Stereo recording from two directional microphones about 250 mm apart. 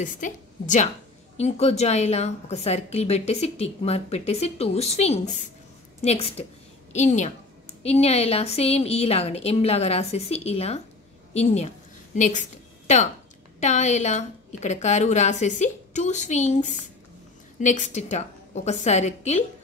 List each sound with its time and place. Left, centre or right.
0.0 s a woman's voice: left